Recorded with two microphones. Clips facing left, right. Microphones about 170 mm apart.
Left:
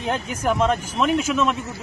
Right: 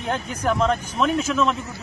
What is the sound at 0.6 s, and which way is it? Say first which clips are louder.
Speech: even; 5° left (ahead or behind).